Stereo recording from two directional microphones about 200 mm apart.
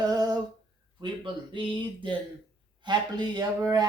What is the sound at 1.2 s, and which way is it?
Speech, 25° right (ahead or behind).